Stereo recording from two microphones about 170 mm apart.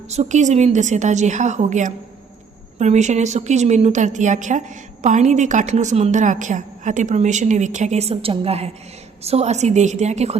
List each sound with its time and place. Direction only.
0.1 s a woman's voice: 45° right (ahead or behind)